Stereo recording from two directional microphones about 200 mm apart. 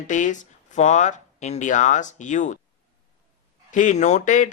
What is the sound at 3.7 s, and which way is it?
Speech, 40° left (ahead or behind).